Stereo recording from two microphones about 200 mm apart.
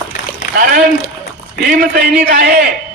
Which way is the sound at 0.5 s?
45° right (ahead or behind).